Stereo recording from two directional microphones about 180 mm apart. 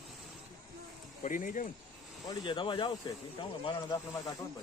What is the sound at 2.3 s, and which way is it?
Speech, 25° left (ahead or behind).